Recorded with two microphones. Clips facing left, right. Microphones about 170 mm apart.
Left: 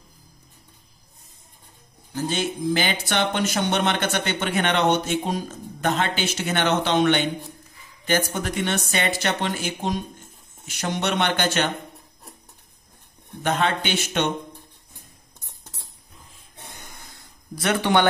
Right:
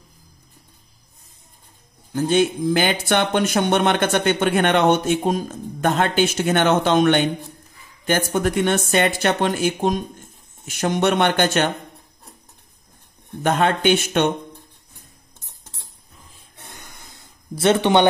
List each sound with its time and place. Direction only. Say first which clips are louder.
2.1 s speech: right 8 dB; 55° right (ahead or behind)
13.4 s speech: right 5 dB; 50° right (ahead or behind)
17.2 s speech: right 8 dB; 25° right (ahead or behind)